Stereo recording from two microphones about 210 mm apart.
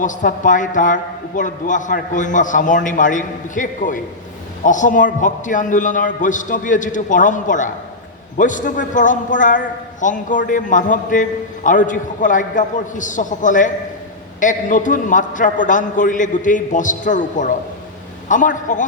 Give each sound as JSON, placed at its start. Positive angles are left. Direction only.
{"t": 0.0, "sound": "a man's voice", "side_deg": 40}